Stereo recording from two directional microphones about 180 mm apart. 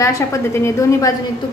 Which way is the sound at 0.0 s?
15° left (ahead or behind).